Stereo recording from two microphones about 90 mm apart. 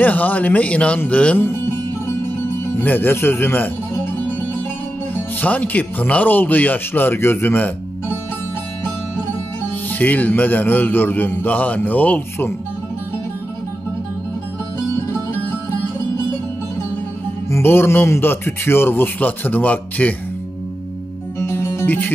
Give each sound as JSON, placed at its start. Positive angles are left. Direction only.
{"t": 0.0, "sound": "speech", "side_deg": 20}
{"t": 2.8, "sound": "speech", "side_deg": 20}
{"t": 5.1, "sound": "speech", "side_deg": 15}
{"t": 9.8, "sound": "speech", "side_deg": 15}
{"t": 17.5, "sound": "speech", "side_deg": 25}
{"t": 21.4, "sound": "music", "side_deg": 30}